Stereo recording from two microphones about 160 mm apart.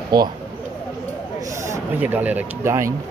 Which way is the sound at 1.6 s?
15° right (ahead or behind).